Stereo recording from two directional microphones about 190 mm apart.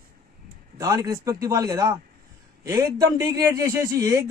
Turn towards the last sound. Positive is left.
turn(degrees=-15)  # may be behind; listen again after turning